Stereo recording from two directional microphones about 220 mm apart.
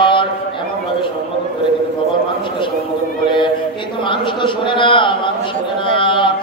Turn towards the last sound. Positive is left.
turn(degrees=20)  # may be behind; listen again after turning